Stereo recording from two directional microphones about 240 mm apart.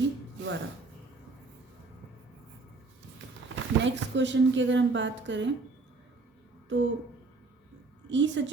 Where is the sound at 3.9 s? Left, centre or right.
Right.